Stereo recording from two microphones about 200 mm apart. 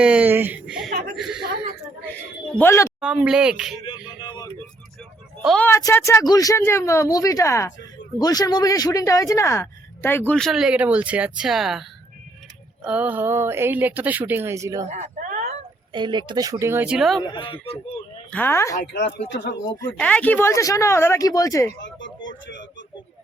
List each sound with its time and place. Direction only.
0.0 s speech: 5° right (ahead or behind)
2.6 s speech: 15° left (ahead or behind)
3.0 s speech: 5° right (ahead or behind)
3.8 s speech: 20° left (ahead or behind)
5.4 s speech: centre (ahead or behind)
5.6 s speech: 10° left (ahead or behind); by 14.8 s 15° right (ahead or behind)
14.9 s a sound: 40° right (ahead or behind)
15.9 s speech: 20° right (ahead or behind); by 17.2 s centre (ahead or behind)
17.2 s speech: 25° left (ahead or behind)
18.3 s speech: 10° left (ahead or behind)
18.8 s speech: 60° left (ahead or behind)
20.0 s speech: 5° left (ahead or behind)
21.8 s a sound: 70° left (ahead or behind)